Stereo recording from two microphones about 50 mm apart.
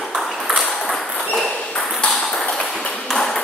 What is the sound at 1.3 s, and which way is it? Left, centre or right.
Ping, centre.